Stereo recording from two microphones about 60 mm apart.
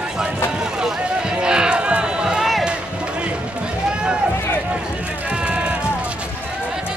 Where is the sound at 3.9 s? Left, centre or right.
Centre.